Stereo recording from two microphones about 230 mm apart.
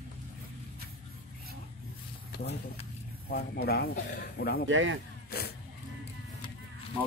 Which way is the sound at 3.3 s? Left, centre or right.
Left.